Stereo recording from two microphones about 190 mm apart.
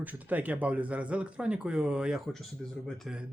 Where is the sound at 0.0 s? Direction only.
10° right (ahead or behind).